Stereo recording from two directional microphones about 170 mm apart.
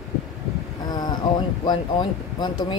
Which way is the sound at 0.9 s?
25° left (ahead or behind).